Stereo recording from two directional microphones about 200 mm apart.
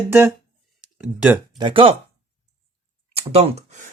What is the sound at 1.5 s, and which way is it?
Speech, 25° right (ahead or behind).